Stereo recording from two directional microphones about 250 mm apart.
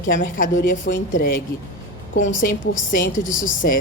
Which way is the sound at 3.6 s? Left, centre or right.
Left.